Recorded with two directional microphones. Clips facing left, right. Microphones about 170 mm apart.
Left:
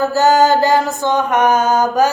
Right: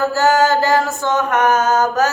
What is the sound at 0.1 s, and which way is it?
Mantra, 15° left (ahead or behind).